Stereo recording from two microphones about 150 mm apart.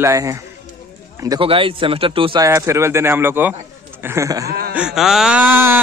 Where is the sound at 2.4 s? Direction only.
20° right (ahead or behind).